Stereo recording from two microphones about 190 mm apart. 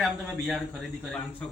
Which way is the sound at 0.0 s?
Centre (ahead or behind).